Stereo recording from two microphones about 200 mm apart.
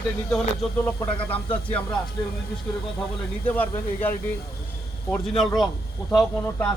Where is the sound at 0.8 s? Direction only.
10° left (ahead or behind).